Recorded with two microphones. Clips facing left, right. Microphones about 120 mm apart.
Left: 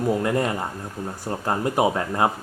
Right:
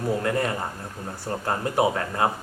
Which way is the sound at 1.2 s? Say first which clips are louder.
Left 2 dB; 20° left (ahead or behind).